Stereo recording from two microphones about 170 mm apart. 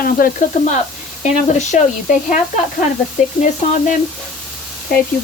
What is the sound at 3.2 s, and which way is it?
Speech, 45° left (ahead or behind).